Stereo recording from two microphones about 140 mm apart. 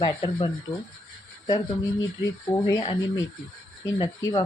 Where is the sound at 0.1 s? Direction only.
30° left (ahead or behind).